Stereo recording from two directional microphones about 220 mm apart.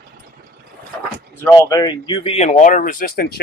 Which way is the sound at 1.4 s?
15° left (ahead or behind).